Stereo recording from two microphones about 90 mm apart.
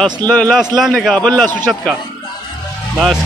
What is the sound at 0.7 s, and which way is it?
Speech, centre (ahead or behind).